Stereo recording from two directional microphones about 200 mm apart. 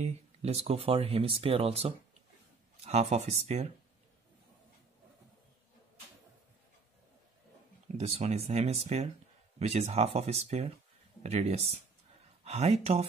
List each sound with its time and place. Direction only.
0.0 s speech: 30° right (ahead or behind)
8.0 s speech: 30° right (ahead or behind)